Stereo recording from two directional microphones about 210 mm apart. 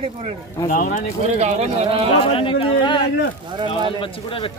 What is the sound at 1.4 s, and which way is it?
Speech, 30° right (ahead or behind).